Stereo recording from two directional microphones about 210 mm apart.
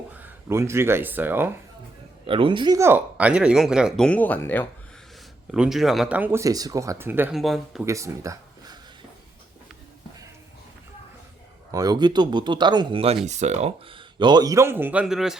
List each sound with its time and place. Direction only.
0.1 s speech: 10° right (ahead or behind)
2.2 s speech: 25° right (ahead or behind); by 4.7 s 10° left (ahead or behind)
5.5 s speech: centre (ahead or behind)
7.9 s speech: 15° right (ahead or behind)
11.7 s speech: 15° right (ahead or behind); by 15.4 s centre (ahead or behind)